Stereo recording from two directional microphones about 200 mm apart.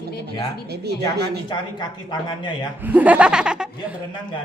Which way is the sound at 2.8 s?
5° right (ahead or behind).